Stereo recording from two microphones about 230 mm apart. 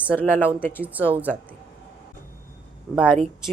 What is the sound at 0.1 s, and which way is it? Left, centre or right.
Speech, centre.